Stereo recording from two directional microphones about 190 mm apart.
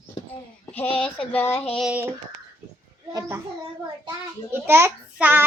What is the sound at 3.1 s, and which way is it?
Speech, 15° right (ahead or behind).